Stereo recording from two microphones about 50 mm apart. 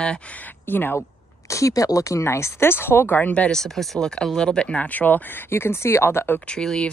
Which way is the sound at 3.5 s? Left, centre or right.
Centre.